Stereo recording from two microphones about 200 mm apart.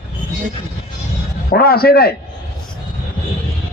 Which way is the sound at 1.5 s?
50° left (ahead or behind).